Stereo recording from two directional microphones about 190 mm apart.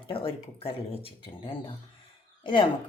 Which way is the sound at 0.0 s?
30° left (ahead or behind).